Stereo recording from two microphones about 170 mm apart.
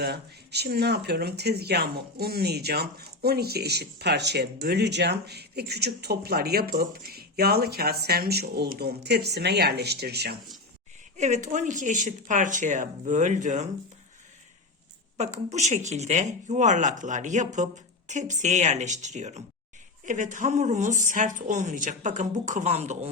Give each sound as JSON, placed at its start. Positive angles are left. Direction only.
{"t": 0.0, "sound": "speech", "side_deg": -70}
{"t": 11.2, "sound": "speech", "side_deg": -45}
{"t": 15.2, "sound": "speech", "side_deg": -40}